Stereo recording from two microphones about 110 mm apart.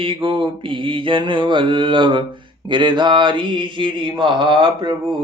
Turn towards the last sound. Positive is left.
turn(degrees=-45)  # may be behind; listen again after turning